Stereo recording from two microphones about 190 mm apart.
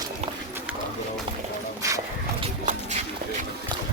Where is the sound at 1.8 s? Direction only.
15° right (ahead or behind).